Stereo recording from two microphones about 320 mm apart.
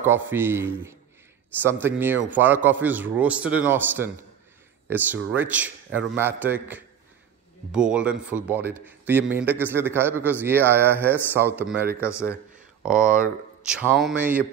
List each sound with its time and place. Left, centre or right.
0.0 s a man's voice: centre
12.0 s speech: centre
12.8 s a man's voice: centre